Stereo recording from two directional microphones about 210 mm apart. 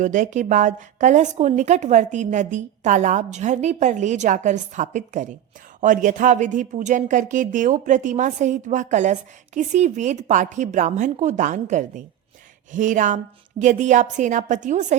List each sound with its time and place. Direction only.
0.0 s a woman's voice: 35° right (ahead or behind)